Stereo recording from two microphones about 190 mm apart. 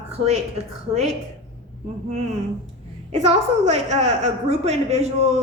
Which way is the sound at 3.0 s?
35° right (ahead or behind).